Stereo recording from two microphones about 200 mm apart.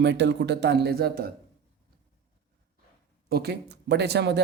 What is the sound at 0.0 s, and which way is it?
Speech, 60° right (ahead or behind).